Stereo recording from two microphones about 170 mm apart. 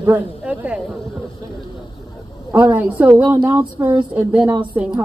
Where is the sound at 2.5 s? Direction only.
10° right (ahead or behind).